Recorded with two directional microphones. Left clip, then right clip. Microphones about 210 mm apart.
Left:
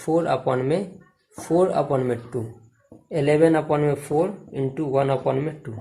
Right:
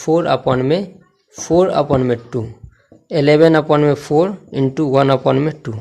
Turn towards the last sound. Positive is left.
turn(degrees=-45)  # may be behind; listen again after turning